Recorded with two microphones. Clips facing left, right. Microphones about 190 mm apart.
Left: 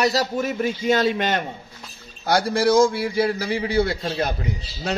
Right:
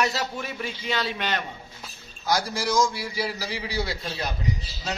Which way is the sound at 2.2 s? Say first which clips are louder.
Left 7 dB; 60° left (ahead or behind).